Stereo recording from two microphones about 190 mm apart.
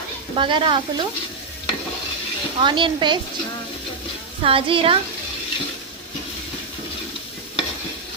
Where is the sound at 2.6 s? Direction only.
25° right (ahead or behind).